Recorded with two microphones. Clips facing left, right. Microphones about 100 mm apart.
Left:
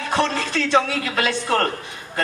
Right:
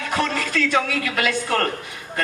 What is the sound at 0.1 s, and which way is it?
A man's voice, 30° left (ahead or behind).